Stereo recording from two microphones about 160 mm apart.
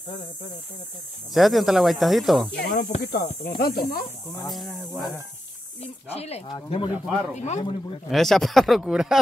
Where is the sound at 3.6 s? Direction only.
65° left (ahead or behind).